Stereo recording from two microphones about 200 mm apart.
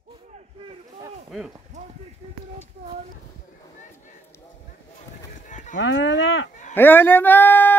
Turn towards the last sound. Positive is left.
turn(degrees=10)  # may be behind; listen again after turning